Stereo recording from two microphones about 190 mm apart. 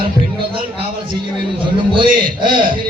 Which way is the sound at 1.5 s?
25° right (ahead or behind).